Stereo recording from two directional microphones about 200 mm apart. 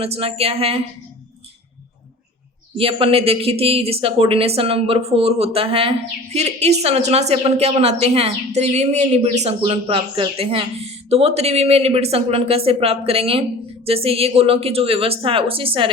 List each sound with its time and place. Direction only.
0.0 s speech: 30° right (ahead or behind)
2.7 s a woman's voice: 25° right (ahead or behind)